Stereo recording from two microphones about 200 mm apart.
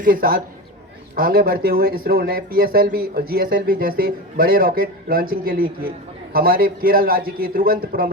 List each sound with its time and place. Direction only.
0.0 s speech: 45° right (ahead or behind)